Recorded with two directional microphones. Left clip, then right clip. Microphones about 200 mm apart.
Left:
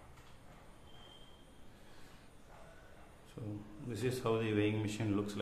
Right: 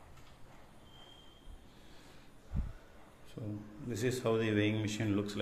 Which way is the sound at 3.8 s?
15° right (ahead or behind).